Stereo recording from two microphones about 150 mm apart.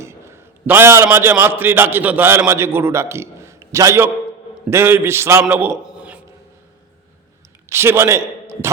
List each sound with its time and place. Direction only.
0.0 s a man's voice: 15° right (ahead or behind)
5.7 s a sound: 5° right (ahead or behind)
7.7 s a man's voice: 15° right (ahead or behind)